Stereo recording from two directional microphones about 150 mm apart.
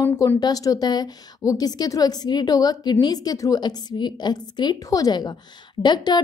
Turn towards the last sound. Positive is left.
turn(degrees=30)  # may be behind; listen again after turning